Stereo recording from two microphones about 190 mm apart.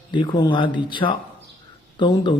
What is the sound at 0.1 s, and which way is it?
A man's voice, 25° left (ahead or behind).